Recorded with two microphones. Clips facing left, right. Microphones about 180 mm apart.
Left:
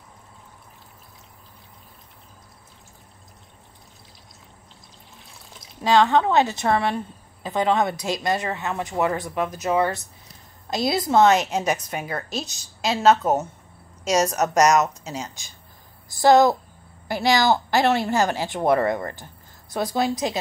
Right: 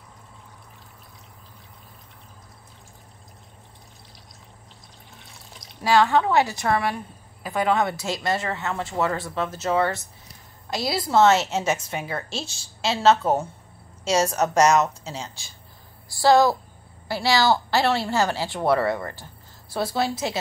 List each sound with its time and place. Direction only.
5.8 s a woman's voice: 20° left (ahead or behind)
11.6 s a woman's voice: 25° right (ahead or behind)
13.1 s a woman's voice: 10° left (ahead or behind)
14.0 s a woman's voice: 30° right (ahead or behind)
15.0 s a woman's voice: 15° left (ahead or behind)